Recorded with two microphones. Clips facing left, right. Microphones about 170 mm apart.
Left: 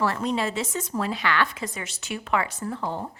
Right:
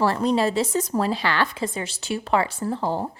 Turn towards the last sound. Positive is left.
turn(degrees=-35)  # may be behind; listen again after turning